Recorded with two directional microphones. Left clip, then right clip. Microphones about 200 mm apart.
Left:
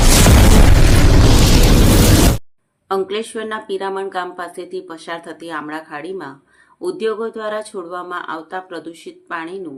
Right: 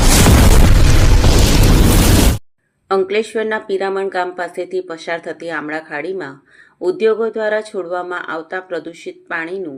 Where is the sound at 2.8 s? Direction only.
10° right (ahead or behind).